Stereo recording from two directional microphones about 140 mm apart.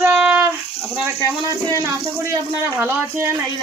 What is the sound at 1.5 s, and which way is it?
Speech, 25° right (ahead or behind).